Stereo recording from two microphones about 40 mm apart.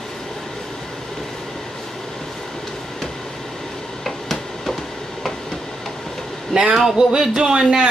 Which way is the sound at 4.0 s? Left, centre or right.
Centre.